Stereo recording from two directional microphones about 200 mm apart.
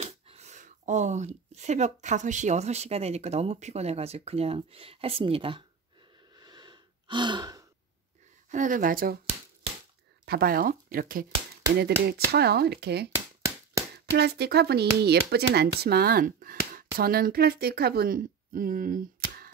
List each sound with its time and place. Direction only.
0.0 s speech: 35° right (ahead or behind)
6.3 s gasp: 20° right (ahead or behind)
8.5 s speech: 40° right (ahead or behind)
9.2 s shuffling cards: 35° right (ahead or behind)
10.2 s speech: 50° right (ahead or behind)